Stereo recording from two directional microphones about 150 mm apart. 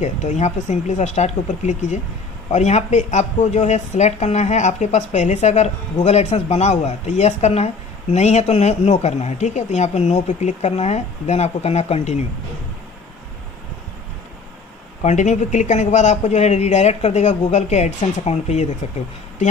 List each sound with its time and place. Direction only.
0.0 s a woman's voice: 50° left (ahead or behind)
15.0 s a woman's voice: 50° left (ahead or behind)